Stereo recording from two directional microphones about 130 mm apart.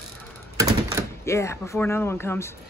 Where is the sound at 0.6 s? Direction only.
25° right (ahead or behind).